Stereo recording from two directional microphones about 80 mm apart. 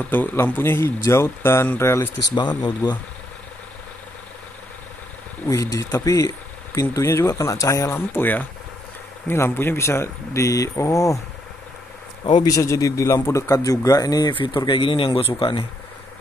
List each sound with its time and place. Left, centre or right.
0.1 s speech: left
2.8 s speech: left
5.5 s speech: left
12.4 s speech: left
14.3 s speech: left